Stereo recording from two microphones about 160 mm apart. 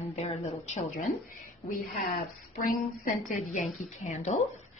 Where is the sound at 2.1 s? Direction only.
60° left (ahead or behind); by 4.4 s 45° left (ahead or behind).